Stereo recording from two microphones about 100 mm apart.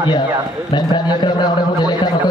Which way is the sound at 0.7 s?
45° left (ahead or behind).